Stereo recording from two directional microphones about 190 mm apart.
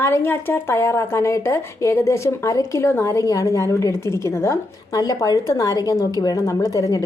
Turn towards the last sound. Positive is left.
turn(degrees=20)  # may be behind; listen again after turning